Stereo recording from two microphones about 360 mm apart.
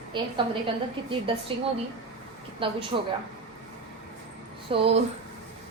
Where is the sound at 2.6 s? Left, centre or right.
Centre.